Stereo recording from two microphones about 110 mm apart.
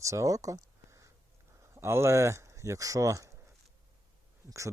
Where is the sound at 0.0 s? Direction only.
30° right (ahead or behind).